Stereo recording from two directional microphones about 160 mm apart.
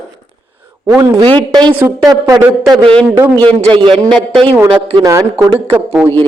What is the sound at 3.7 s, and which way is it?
Speech, 30° right (ahead or behind).